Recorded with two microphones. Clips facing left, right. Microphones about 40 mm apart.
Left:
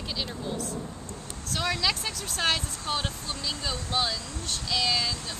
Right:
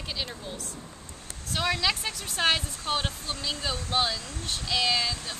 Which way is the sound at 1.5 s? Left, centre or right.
Centre.